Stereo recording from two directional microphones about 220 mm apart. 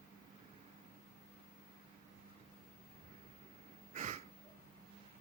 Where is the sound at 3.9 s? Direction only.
30° right (ahead or behind).